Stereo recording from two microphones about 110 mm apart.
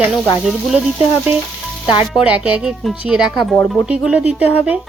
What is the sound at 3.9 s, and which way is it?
Speech, 10° right (ahead or behind).